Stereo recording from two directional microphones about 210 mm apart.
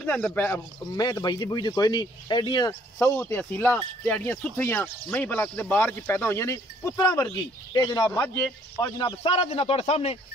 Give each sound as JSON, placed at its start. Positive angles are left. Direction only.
{"t": 0.0, "sound": "speech", "side_deg": 10}
{"t": 3.2, "sound": "speech", "side_deg": 10}